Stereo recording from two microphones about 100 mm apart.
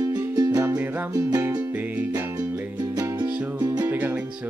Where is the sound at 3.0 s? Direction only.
40° right (ahead or behind).